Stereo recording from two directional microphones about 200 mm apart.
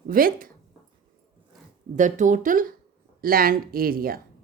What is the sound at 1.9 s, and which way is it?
Speech, 40° right (ahead or behind).